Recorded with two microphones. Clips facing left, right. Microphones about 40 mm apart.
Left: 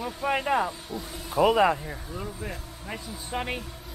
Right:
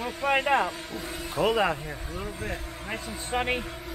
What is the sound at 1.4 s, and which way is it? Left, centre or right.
Speech, centre.